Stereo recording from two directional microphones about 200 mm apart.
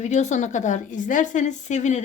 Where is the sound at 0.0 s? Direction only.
35° left (ahead or behind).